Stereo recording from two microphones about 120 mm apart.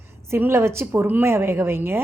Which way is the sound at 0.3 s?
20° right (ahead or behind).